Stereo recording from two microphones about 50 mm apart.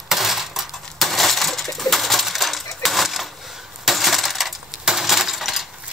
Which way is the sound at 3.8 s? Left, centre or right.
Centre.